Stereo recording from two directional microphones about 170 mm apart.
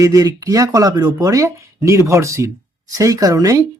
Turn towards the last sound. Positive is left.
turn(degrees=-20)  # may be behind; listen again after turning